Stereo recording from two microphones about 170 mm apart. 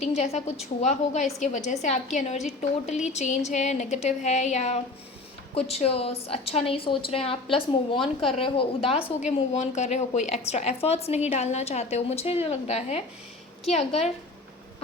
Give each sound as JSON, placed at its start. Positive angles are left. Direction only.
{"t": 0.0, "sound": "a woman's voice", "side_deg": 40}